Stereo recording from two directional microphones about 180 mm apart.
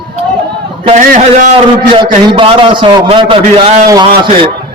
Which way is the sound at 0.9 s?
45° right (ahead or behind).